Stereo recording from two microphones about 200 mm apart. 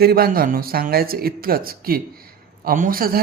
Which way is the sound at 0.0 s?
50° right (ahead or behind).